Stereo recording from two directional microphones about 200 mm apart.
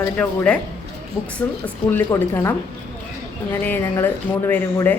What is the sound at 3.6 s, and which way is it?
A woman's voice, 10° left (ahead or behind).